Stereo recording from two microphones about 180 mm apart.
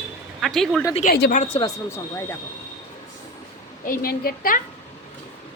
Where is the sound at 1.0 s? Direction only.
50° left (ahead or behind).